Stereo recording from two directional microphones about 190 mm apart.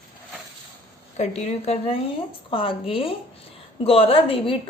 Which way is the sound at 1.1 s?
35° left (ahead or behind).